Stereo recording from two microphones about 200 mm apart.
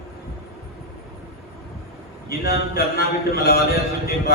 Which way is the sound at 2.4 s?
50° left (ahead or behind).